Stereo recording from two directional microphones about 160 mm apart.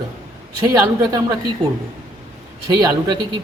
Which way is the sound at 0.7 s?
25° right (ahead or behind).